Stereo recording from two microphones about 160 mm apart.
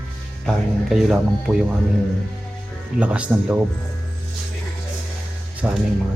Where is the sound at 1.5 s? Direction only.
15° right (ahead or behind).